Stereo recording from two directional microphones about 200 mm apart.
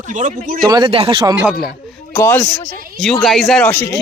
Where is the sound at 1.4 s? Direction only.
Centre (ahead or behind).